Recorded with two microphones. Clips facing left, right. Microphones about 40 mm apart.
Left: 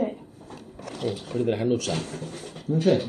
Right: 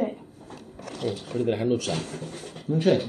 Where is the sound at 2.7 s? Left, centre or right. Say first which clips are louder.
Left 1 dB; centre.